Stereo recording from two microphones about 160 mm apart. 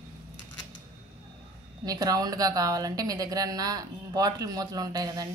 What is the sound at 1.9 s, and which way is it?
A woman's voice, 25° right (ahead or behind).